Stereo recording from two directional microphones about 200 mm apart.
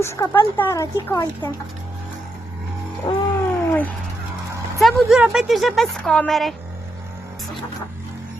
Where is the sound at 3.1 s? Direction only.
20° left (ahead or behind).